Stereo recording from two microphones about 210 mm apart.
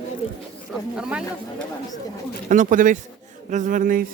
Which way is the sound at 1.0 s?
5° right (ahead or behind).